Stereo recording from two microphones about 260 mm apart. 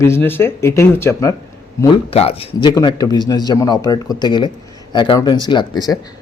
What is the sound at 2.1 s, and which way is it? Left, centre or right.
A man's voice, left.